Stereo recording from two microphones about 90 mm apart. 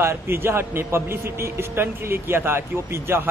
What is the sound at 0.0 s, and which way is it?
A man's voice, 30° right (ahead or behind).